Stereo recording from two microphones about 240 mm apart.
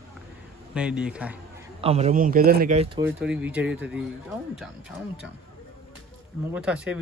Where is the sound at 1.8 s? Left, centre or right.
Right.